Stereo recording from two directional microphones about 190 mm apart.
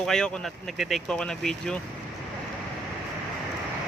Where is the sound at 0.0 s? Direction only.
5° left (ahead or behind).